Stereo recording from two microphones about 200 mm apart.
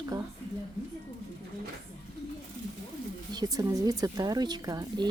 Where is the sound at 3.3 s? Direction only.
20° right (ahead or behind).